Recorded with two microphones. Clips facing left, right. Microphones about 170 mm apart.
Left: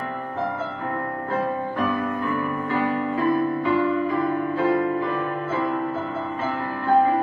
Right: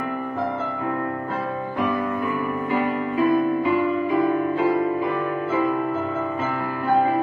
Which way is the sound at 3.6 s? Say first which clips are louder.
Even; 15° right (ahead or behind).